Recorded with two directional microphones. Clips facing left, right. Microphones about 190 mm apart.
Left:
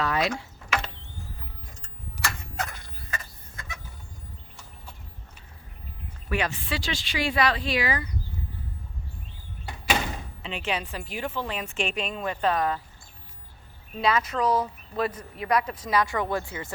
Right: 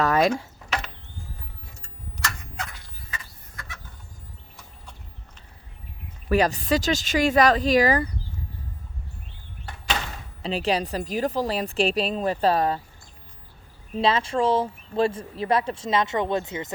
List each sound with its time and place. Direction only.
0.0 s mechanisms: 45° right (ahead or behind)
2.6 s a sound: 50° left (ahead or behind)
3.5 s chicken: 20° left (ahead or behind)
6.2 s a woman's voice: 40° right (ahead or behind)
9.6 s door: 10° left (ahead or behind)
10.4 s a woman's voice: 35° right (ahead or behind)
14.0 s speech: 30° right (ahead or behind)